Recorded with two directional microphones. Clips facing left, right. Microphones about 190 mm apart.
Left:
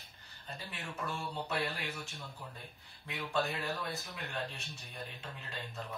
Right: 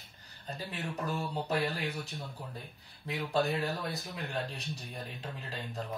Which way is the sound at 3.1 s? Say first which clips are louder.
Right 5 dB; 35° right (ahead or behind).